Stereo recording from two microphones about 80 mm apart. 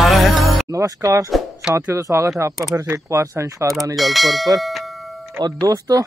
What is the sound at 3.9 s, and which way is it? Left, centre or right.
Speech, centre.